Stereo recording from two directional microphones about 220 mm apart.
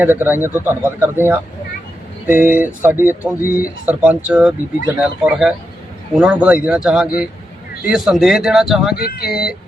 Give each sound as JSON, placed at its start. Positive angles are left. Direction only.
{"t": 0.0, "sound": "speech", "side_deg": -10}
{"t": 9.0, "sound": "speech", "side_deg": 45}
{"t": 9.3, "sound": "speech", "side_deg": -5}